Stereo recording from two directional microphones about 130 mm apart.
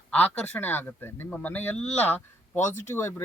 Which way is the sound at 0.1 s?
10° left (ahead or behind).